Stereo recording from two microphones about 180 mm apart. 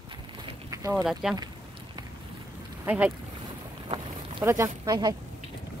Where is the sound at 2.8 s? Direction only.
10° right (ahead or behind).